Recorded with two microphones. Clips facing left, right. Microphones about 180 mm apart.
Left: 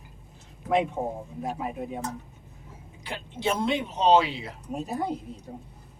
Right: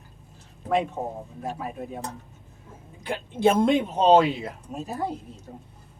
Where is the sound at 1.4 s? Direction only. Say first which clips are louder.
Left 1 dB; 15° left (ahead or behind).